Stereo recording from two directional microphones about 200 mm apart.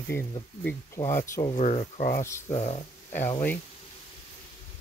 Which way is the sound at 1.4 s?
35° left (ahead or behind).